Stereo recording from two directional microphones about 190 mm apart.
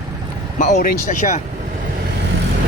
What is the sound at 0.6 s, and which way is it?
Speech, 40° left (ahead or behind).